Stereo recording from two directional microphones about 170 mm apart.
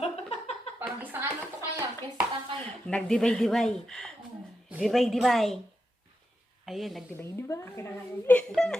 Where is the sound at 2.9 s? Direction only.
5° left (ahead or behind).